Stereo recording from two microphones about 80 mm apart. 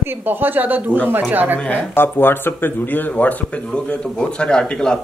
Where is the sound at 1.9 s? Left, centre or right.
Left.